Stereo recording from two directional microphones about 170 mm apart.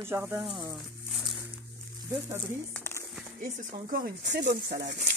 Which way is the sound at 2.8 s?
15° left (ahead or behind).